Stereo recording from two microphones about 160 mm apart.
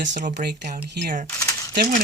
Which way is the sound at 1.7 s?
75° right (ahead or behind).